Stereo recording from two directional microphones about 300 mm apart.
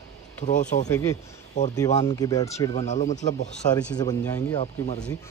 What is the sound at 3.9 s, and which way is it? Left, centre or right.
Speech, centre.